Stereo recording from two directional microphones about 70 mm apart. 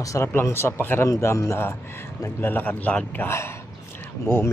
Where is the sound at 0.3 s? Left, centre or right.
Left.